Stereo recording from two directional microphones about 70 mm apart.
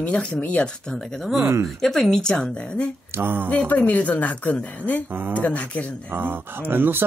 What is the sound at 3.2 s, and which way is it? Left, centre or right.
Speech, right.